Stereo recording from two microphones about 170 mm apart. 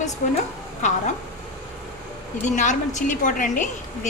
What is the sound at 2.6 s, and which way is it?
A woman's voice, 45° left (ahead or behind).